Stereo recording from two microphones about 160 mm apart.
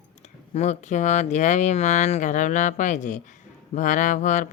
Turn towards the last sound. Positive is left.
turn(degrees=50)  # may be behind; listen again after turning